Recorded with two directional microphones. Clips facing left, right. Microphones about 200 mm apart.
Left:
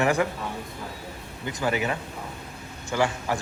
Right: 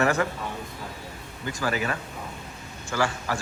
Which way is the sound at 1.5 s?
20° left (ahead or behind).